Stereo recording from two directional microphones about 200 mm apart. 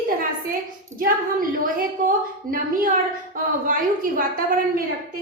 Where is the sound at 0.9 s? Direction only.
45° right (ahead or behind).